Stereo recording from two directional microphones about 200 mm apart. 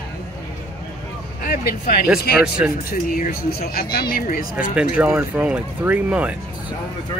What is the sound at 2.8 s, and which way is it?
Speech, 45° left (ahead or behind).